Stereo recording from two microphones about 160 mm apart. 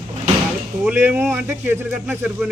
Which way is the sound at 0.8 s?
10° right (ahead or behind).